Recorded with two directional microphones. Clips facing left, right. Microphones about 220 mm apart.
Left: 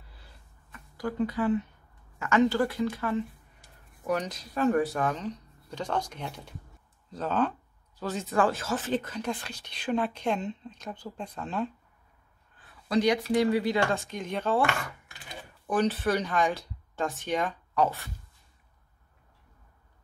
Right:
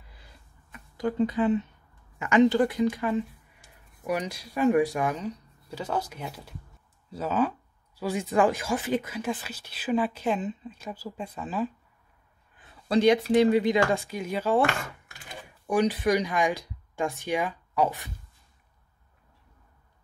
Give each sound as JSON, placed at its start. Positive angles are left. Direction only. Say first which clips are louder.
{"t": 0.2, "sound": "a sound", "louder": "right 1 dB", "side_deg": -15}
{"t": 2.1, "sound": "speech", "louder": "right 4 dB", "side_deg": -15}
{"t": 12.5, "sound": "speech", "louder": "right 2 dB", "side_deg": -25}
{"t": 14.0, "sound": "speech", "louder": "right 2 dB", "side_deg": -5}
{"t": 15.6, "sound": "speech", "louder": "right 2 dB", "side_deg": -10}